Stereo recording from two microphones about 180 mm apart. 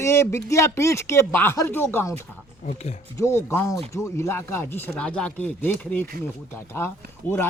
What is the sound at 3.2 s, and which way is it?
Speech, 15° left (ahead or behind).